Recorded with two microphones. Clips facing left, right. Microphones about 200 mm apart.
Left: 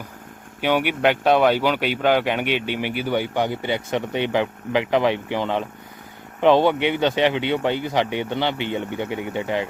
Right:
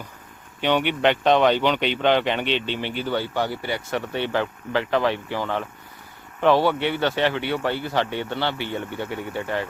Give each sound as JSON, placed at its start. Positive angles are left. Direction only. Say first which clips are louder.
{"t": 0.6, "sound": "speech", "louder": "left 1 dB", "side_deg": 10}